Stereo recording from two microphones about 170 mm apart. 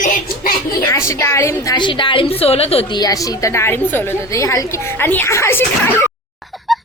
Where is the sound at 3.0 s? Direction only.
20° left (ahead or behind).